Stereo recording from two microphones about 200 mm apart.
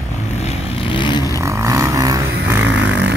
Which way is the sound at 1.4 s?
15° right (ahead or behind).